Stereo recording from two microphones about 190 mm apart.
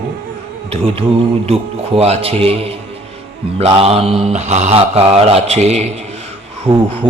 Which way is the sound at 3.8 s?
30° right (ahead or behind).